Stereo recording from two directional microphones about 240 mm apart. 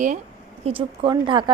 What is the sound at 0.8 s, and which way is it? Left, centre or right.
Speech, centre.